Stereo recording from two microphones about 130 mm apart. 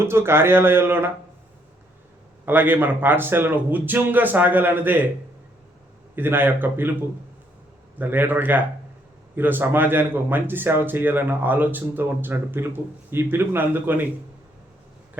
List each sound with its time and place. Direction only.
0.0 s a man's voice: 20° right (ahead or behind)
2.5 s a man's voice: 15° right (ahead or behind)
6.1 s a man's voice: 15° right (ahead or behind)
7.9 s a man's voice: 15° right (ahead or behind)